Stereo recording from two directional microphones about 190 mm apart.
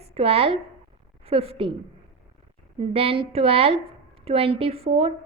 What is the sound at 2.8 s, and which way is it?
A woman's voice, 30° right (ahead or behind).